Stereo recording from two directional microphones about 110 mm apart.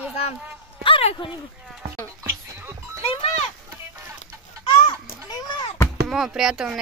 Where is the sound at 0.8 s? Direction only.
55° left (ahead or behind).